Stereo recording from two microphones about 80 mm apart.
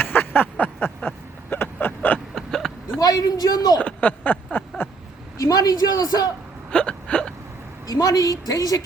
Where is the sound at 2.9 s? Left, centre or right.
Left.